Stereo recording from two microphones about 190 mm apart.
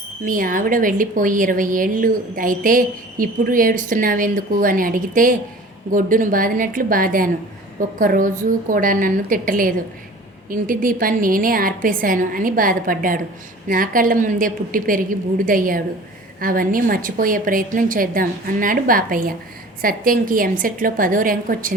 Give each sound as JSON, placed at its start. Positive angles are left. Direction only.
{"t": 0.3, "sound": "a woman's voice", "side_deg": -45}